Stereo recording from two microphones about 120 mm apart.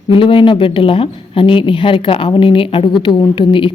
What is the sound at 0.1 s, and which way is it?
A woman's voice, 45° left (ahead or behind).